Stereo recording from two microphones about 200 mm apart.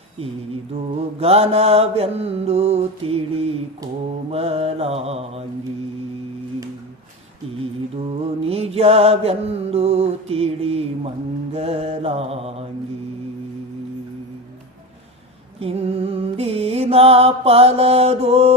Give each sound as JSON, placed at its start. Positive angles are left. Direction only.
{"t": 0.9, "sound": "mantra", "side_deg": -30}
{"t": 7.9, "sound": "mantra", "side_deg": -30}
{"t": 15.6, "sound": "mantra", "side_deg": -30}